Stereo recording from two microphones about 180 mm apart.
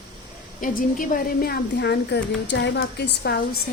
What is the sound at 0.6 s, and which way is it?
Speech, 50° left (ahead or behind).